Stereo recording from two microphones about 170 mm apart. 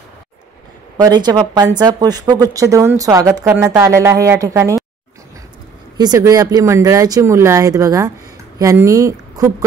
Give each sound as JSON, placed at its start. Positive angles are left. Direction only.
{"t": 0.9, "sound": "a woman's voice", "side_deg": -25}
{"t": 5.9, "sound": "a woman's voice", "side_deg": -20}